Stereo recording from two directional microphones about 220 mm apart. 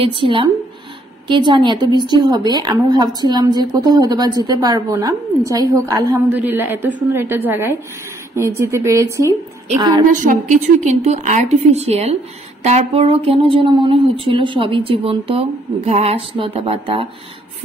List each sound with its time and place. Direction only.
0.0 s a woman's voice: 25° right (ahead or behind)
10.1 s a woman's voice: 35° right (ahead or behind)